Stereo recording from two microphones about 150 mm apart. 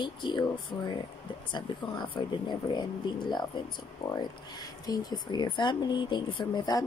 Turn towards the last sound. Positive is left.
turn(degrees=30)  # may be behind; listen again after turning